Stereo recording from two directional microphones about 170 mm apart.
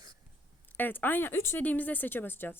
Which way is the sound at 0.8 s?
10° left (ahead or behind).